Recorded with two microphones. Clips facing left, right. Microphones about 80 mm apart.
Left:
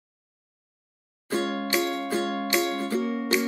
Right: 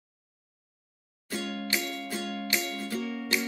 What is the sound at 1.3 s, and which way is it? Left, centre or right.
Music, left.